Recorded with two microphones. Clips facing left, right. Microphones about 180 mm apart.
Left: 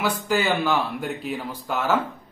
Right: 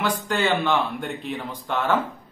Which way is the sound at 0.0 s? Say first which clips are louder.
Left 1 dB; 5° left (ahead or behind).